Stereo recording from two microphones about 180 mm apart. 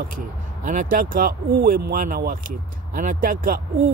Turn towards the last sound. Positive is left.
turn(degrees=-50)  # may be behind; listen again after turning